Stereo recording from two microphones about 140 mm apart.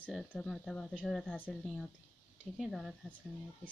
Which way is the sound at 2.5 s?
Centre (ahead or behind).